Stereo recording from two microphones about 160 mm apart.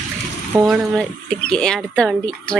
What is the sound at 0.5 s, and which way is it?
Speech, centre (ahead or behind).